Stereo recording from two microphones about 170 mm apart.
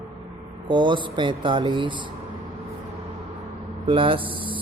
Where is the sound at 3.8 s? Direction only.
30° right (ahead or behind).